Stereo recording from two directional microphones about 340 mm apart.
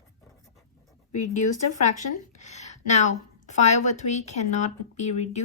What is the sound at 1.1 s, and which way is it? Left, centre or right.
A woman's voice, left.